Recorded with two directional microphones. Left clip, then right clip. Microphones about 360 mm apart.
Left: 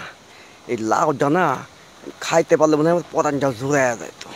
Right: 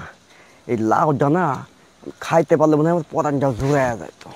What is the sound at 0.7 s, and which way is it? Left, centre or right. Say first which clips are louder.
Speech: right 1 dB; right.